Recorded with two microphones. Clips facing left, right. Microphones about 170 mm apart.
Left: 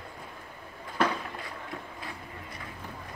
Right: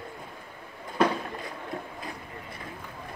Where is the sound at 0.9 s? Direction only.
25° right (ahead or behind).